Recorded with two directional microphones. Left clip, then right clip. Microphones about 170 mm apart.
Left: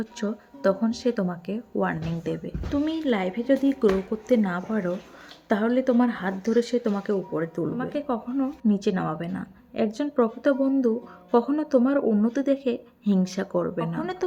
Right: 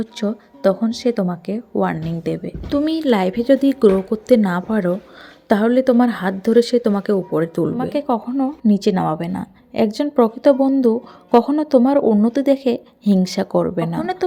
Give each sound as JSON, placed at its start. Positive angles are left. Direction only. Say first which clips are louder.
{"t": 0.0, "sound": "a woman's voice", "louder": "right 7 dB", "side_deg": -25}
{"t": 14.0, "sound": "speech", "louder": "right 8 dB", "side_deg": -20}